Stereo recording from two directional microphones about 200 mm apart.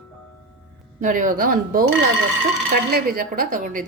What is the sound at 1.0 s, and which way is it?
A woman's voice, 40° right (ahead or behind).